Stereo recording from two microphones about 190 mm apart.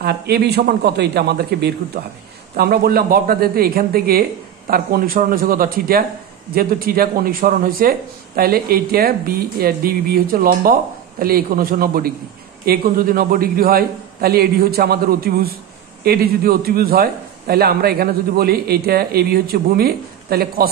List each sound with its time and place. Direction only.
0.0 s a man's voice: 60° right (ahead or behind)